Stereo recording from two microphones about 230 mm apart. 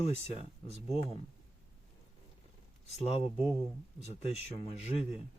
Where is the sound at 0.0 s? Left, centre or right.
Left.